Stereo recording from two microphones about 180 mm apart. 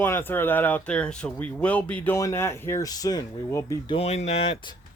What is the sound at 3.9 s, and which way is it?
Speech, 35° left (ahead or behind).